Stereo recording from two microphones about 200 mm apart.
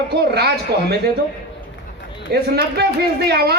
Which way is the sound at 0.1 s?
55° right (ahead or behind).